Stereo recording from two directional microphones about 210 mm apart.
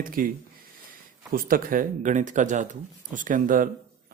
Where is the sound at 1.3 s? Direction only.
45° right (ahead or behind).